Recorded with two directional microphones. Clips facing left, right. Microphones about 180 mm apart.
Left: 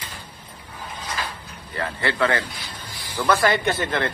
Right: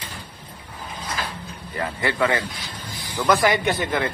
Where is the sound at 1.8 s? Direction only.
15° right (ahead or behind).